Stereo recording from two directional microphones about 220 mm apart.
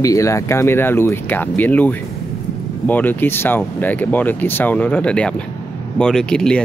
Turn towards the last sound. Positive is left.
turn(degrees=5)  # may be behind; listen again after turning